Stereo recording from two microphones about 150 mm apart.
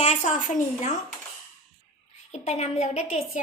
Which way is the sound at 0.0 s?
50° left (ahead or behind).